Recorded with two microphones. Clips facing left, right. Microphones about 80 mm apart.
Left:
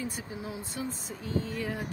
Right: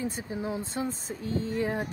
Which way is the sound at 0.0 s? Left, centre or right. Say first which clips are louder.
Right 4 dB; right.